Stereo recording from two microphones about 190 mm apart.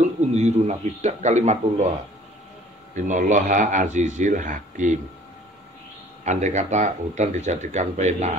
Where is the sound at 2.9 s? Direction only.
40° right (ahead or behind).